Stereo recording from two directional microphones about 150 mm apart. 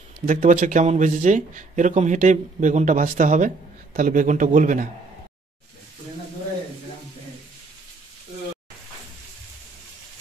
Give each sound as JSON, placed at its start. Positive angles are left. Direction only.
{"t": 0.2, "sound": "speech", "side_deg": -60}